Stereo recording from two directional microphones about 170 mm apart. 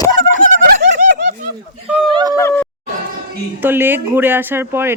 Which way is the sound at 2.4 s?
10° left (ahead or behind).